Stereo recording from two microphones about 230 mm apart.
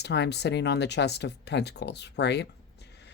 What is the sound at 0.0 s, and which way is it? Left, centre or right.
Speech, left.